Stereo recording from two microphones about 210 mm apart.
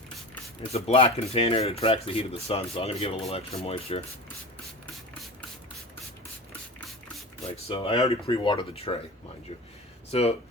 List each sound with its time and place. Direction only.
0.7 s speech: 30° left (ahead or behind)
7.5 s speech: 25° left (ahead or behind)
10.1 s speech: 30° left (ahead or behind)